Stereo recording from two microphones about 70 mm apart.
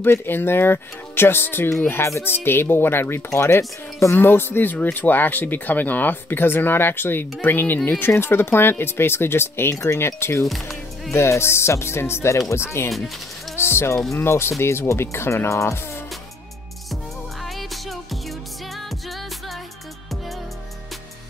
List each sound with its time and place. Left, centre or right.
0.0 s speech: left
12.9 s speech: centre
13.6 s speech: left
16.9 s music: centre